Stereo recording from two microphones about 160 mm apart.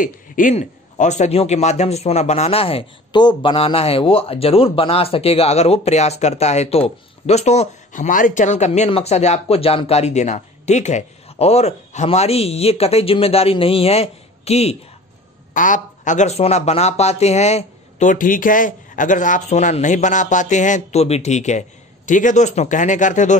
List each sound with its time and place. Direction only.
0.0 s a man's voice: 50° left (ahead or behind)
15.5 s speech: 55° left (ahead or behind)